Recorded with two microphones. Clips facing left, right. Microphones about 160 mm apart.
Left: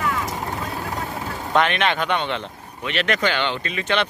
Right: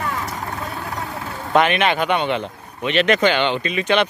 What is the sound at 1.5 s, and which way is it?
Speech, 10° right (ahead or behind).